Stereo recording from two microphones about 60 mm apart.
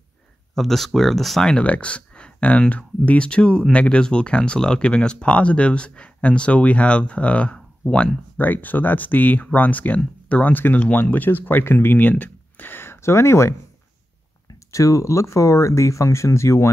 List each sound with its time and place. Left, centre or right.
0.6 s speech: centre
1.6 s speech: left
8.4 s speech: left
14.7 s speech: left